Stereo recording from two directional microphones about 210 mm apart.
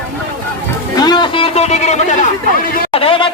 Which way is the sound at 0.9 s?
20° left (ahead or behind).